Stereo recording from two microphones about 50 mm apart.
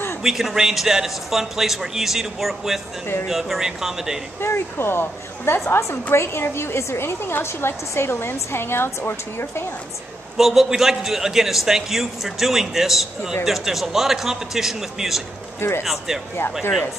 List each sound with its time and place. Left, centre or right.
0.2 s a man's voice: centre
4.4 s a woman's voice: left
10.3 s a man's voice: centre